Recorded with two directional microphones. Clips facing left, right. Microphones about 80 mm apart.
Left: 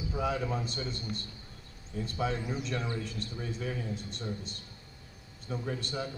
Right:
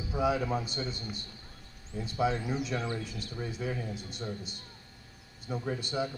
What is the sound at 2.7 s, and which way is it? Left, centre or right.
Speech, right.